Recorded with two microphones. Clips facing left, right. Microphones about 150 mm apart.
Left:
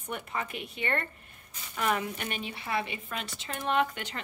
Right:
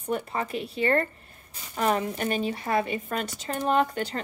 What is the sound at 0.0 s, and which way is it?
A woman's voice, 35° right (ahead or behind).